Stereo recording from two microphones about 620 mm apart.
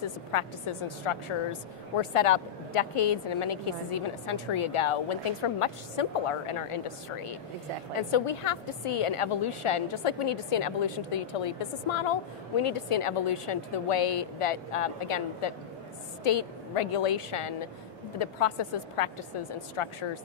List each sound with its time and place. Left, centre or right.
0.3 s a woman's voice: left